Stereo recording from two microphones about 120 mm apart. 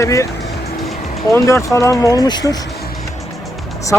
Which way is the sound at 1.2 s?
25° left (ahead or behind).